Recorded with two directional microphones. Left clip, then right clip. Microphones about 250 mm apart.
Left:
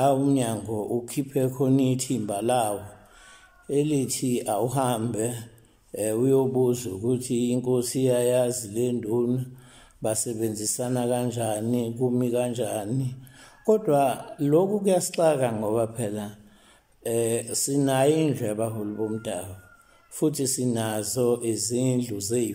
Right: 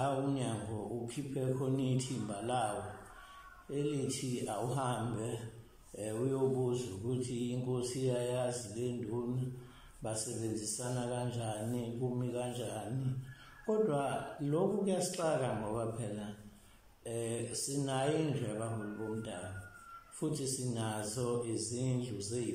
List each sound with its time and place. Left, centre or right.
0.0 s speech: left
3.7 s speech: left